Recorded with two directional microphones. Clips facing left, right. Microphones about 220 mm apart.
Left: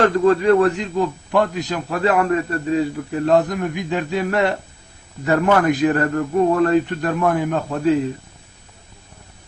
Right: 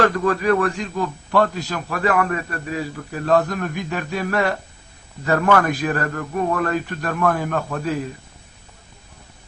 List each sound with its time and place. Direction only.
0.0 s a man's voice: 25° left (ahead or behind)